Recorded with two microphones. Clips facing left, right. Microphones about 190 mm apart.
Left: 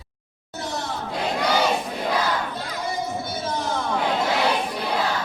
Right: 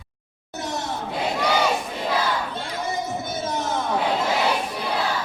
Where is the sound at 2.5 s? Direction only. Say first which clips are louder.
Right 1 dB; 25° right (ahead or behind).